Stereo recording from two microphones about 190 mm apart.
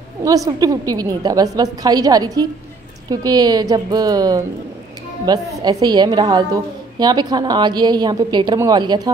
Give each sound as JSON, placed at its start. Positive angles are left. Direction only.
{"t": 0.2, "sound": "a woman's voice", "side_deg": -20}